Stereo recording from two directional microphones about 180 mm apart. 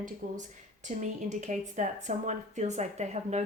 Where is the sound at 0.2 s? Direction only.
45° right (ahead or behind).